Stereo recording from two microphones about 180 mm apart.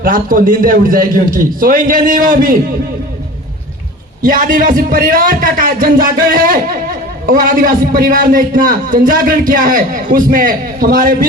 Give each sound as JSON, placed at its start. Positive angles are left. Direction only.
{"t": 0.0, "sound": "a man's voice", "side_deg": -50}
{"t": 4.2, "sound": "a man's voice", "side_deg": -50}